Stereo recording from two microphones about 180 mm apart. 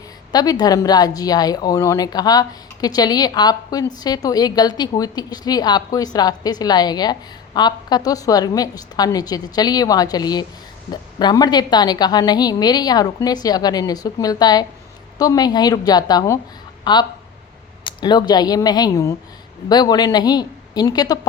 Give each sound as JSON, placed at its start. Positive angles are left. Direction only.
{"t": 0.3, "sound": "speech", "side_deg": 20}